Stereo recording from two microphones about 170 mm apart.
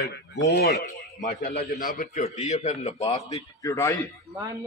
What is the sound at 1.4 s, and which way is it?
A man's voice, 55° left (ahead or behind).